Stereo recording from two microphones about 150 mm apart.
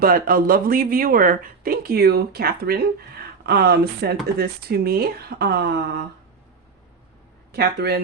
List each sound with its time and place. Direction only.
0.0 s speech: 80° right
7.5 s speech: 90° right